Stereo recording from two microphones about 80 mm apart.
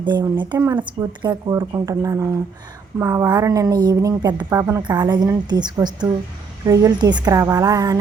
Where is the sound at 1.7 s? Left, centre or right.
Right.